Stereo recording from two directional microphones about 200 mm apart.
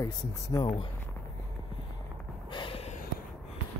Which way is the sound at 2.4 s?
25° left (ahead or behind).